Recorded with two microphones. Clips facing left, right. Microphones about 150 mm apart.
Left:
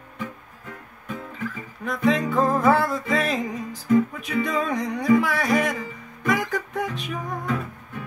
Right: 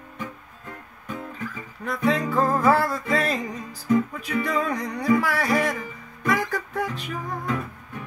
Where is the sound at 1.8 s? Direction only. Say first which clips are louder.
Left 2 dB; centre (ahead or behind).